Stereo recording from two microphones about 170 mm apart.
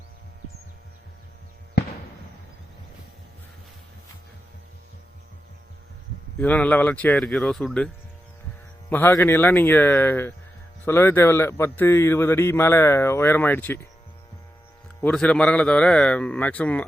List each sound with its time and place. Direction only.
1.8 s fireworks: 80° left
6.4 s a man's voice: 10° left (ahead or behind)
8.9 s a man's voice: 10° left (ahead or behind)
15.0 s a man's voice: 5° left (ahead or behind)